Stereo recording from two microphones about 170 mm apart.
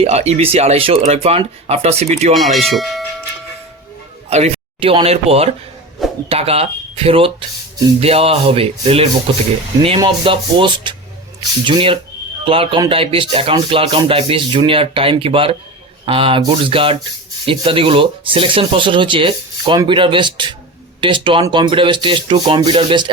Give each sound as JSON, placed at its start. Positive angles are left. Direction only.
{"t": 0.0, "sound": "speech", "side_deg": -40}
{"t": 2.3, "sound": "speech", "side_deg": 0}
{"t": 4.3, "sound": "speech", "side_deg": -40}